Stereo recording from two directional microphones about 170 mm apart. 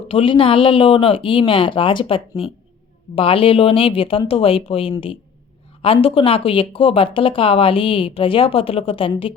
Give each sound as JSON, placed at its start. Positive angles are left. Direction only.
{"t": 0.1, "sound": "speech", "side_deg": 30}